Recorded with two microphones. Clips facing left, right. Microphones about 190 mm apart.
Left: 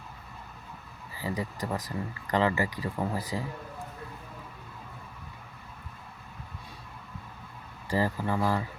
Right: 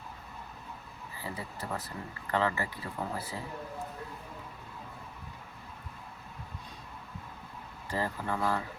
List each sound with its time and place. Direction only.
1.3 s speech: 15° left (ahead or behind)
7.9 s speech: 10° left (ahead or behind)